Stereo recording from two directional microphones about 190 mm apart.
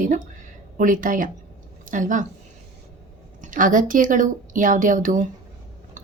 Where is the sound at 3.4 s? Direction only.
45° right (ahead or behind).